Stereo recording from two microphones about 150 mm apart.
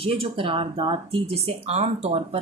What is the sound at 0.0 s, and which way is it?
A woman's voice, 40° right (ahead or behind).